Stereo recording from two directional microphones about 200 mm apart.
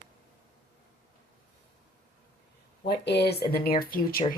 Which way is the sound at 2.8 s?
55° left (ahead or behind).